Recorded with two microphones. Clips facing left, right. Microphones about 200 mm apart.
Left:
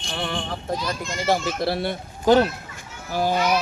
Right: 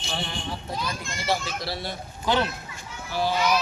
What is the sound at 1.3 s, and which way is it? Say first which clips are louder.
Speech: left 6 dB; 55° left (ahead or behind).